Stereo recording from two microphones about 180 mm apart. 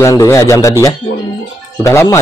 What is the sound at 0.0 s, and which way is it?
A woman's voice, 15° left (ahead or behind).